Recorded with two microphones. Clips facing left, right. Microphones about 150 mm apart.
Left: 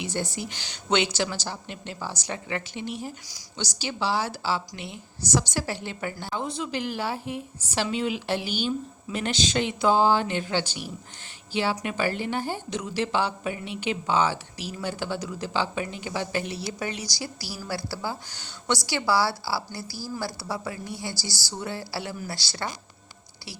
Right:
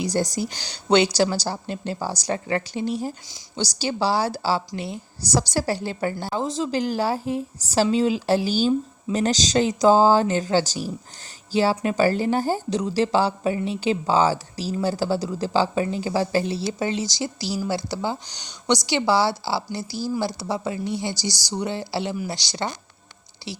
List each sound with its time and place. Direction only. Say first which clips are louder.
0.0 s a woman's voice: right 7 dB; 40° right (ahead or behind); by 22.7 s 20° right (ahead or behind)